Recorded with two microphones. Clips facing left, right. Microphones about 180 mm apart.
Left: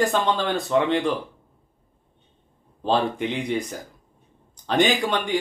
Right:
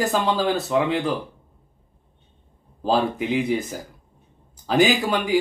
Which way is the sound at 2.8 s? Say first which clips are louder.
Right 1 dB; 5° right (ahead or behind).